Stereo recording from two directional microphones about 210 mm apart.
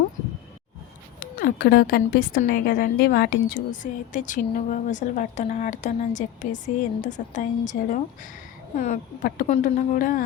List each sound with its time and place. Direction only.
1.2 s a woman's voice: 40° left (ahead or behind)